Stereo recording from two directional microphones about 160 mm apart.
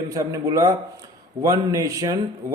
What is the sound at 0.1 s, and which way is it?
A man's voice, 20° right (ahead or behind).